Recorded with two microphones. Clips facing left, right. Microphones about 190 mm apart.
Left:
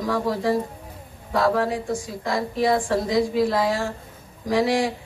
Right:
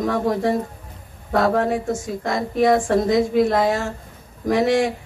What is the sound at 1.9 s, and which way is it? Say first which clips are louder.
Speech: right 2 dB; 20° right (ahead or behind).